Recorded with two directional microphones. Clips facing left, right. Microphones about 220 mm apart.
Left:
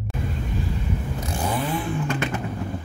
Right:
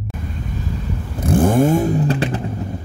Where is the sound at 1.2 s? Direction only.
50° right (ahead or behind); by 2.4 s 35° right (ahead or behind).